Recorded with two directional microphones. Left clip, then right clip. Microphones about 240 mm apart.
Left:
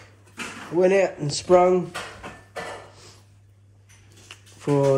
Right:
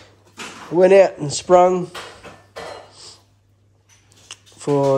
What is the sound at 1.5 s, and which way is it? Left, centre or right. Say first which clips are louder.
Speech: right 4 dB; right.